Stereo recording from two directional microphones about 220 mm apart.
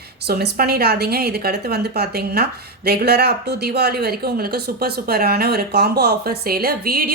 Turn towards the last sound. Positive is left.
turn(degrees=-40)  # may be behind; listen again after turning